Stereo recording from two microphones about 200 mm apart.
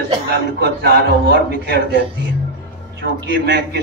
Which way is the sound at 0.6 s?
55° right (ahead or behind).